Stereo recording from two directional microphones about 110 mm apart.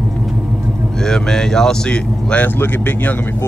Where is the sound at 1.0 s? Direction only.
5° left (ahead or behind).